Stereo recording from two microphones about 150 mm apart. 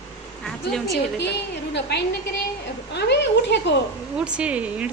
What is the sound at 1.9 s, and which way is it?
Speech, 90° left.